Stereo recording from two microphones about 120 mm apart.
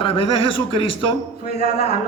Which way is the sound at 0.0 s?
50° left (ahead or behind).